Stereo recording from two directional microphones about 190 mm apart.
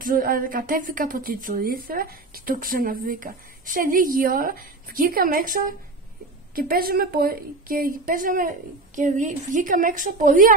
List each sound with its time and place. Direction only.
0.0 s a woman's voice: 50° right (ahead or behind)